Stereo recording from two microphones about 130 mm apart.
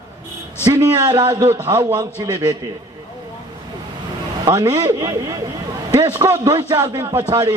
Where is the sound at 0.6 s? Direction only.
30° right (ahead or behind).